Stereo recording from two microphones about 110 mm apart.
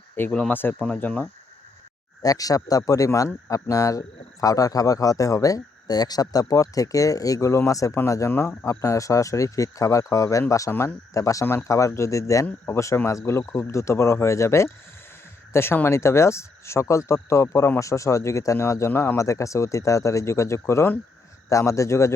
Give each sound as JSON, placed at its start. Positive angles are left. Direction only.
{"t": 0.3, "sound": "speech", "side_deg": 10}
{"t": 2.2, "sound": "speech", "side_deg": 35}